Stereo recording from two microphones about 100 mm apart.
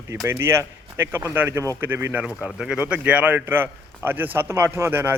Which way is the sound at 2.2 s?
5° right (ahead or behind).